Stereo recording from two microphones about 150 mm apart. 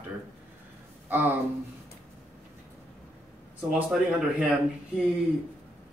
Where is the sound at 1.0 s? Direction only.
15° right (ahead or behind).